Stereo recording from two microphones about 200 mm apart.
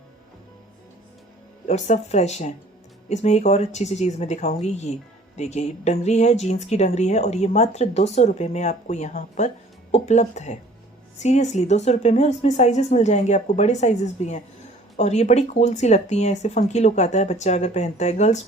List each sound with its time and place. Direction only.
1.6 s speech: 35° left (ahead or behind)